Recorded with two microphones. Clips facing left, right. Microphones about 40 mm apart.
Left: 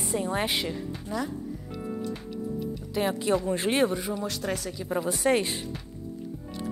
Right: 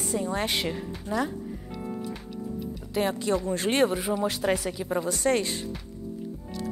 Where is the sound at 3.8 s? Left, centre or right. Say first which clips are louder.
Right 2 dB; centre.